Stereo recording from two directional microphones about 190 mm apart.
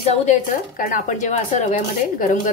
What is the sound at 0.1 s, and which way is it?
Speech, 40° left (ahead or behind).